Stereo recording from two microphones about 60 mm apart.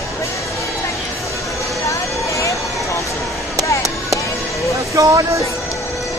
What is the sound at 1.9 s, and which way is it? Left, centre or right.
Vehicle, left.